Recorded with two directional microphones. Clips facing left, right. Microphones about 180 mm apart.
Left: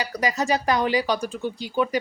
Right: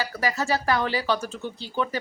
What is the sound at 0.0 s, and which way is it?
Speech, 15° left (ahead or behind).